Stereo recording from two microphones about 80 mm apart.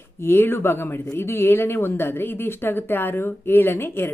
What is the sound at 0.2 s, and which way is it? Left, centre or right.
Speech, left.